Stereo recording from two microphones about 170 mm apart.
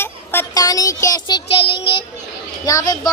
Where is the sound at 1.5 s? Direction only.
30° left (ahead or behind).